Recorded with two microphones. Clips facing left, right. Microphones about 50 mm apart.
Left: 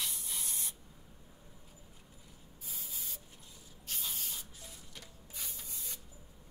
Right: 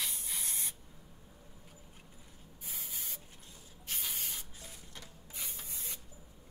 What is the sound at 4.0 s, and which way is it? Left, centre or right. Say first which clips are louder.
Spray: right 1 dB; right.